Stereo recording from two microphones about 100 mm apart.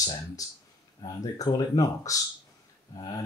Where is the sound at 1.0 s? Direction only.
40° left (ahead or behind).